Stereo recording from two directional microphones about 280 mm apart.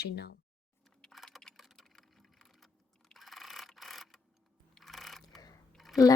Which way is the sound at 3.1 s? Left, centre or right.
Centre.